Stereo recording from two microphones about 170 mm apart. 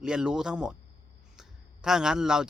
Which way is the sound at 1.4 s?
5° right (ahead or behind).